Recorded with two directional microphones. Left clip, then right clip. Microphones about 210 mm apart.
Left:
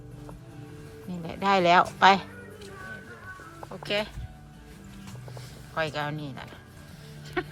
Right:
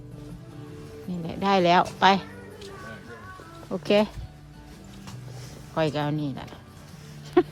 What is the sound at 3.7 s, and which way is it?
Speech, 30° right (ahead or behind).